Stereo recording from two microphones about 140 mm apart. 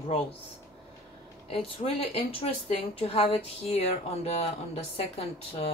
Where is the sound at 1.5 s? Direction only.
45° left (ahead or behind).